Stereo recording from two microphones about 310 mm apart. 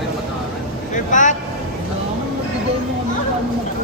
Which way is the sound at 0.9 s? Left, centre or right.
Left.